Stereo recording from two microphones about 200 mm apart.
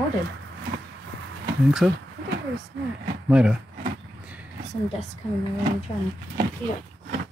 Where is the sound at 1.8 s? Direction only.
Centre (ahead or behind).